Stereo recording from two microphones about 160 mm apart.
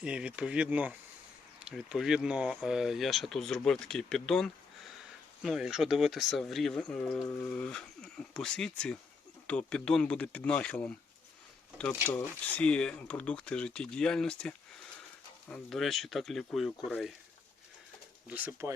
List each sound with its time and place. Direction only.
0.0 s speech: 5° right (ahead or behind)
7.2 s speech: 20° left (ahead or behind)
7.5 s speech: 5° left (ahead or behind)
12.0 s speech: 10° left (ahead or behind)
18.3 s speech: 10° right (ahead or behind)